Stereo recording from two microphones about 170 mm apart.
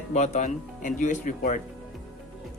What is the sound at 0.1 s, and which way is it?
Speech, 45° left (ahead or behind).